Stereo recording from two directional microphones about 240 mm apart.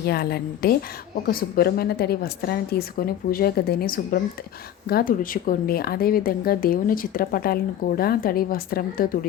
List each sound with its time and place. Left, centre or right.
0.1 s speech: left